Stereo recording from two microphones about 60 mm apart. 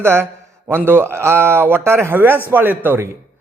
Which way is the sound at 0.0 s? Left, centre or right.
Right.